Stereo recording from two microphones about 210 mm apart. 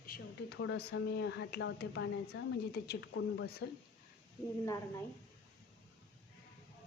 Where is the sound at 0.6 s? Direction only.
75° left (ahead or behind).